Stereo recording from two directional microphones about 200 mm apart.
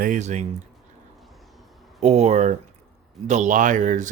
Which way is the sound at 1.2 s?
Centre (ahead or behind).